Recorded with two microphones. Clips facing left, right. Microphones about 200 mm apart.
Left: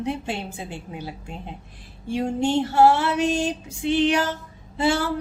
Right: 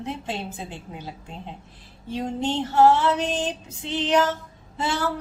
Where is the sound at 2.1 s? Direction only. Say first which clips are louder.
Left 4 dB; 10° left (ahead or behind).